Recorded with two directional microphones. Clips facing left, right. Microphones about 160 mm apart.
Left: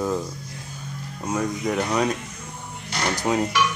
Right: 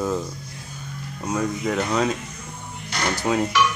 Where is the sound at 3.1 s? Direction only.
15° left (ahead or behind).